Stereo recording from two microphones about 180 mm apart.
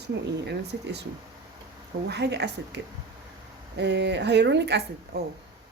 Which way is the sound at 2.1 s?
70° right (ahead or behind).